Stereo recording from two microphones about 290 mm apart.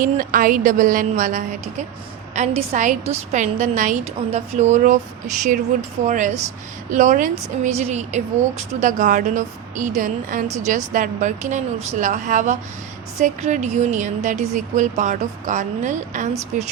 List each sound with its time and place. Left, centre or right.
0.0 s a woman's voice: right